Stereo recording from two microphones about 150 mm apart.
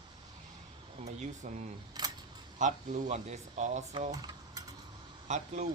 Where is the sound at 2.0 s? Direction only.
30° right (ahead or behind).